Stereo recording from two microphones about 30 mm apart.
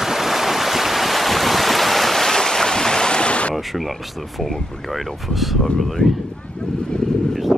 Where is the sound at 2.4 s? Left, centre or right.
Centre; by 3.6 s left.